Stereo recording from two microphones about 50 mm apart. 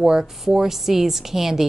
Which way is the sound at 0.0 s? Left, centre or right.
Centre.